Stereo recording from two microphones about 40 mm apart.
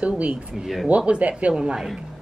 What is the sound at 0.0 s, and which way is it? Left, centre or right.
Speech, right.